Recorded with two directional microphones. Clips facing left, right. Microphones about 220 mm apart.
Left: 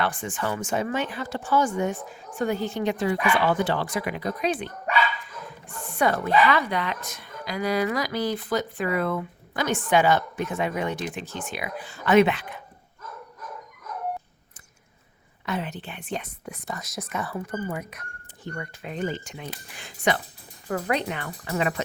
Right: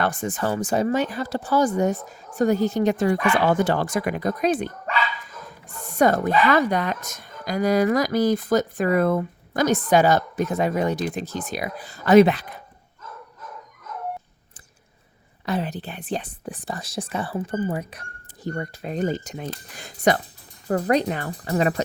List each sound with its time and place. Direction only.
0.0 s speech: 40° right (ahead or behind)
5.8 s a sound: 40° right (ahead or behind)
6.5 s speech: 45° right (ahead or behind)
15.4 s speech: 35° right (ahead or behind)